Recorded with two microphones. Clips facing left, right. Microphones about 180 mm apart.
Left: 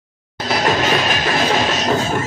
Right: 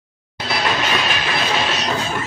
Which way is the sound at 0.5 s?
45° left (ahead or behind).